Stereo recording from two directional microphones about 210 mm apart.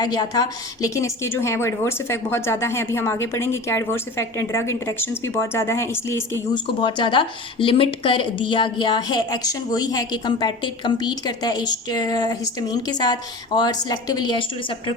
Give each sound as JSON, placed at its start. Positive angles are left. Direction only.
{"t": 0.0, "sound": "a woman's voice", "side_deg": 20}
{"t": 6.8, "sound": "a woman's voice", "side_deg": 25}